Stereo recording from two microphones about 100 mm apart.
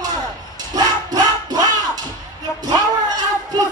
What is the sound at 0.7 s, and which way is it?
Music, 40° right (ahead or behind).